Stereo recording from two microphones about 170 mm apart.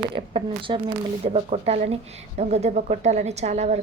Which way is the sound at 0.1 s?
30° right (ahead or behind).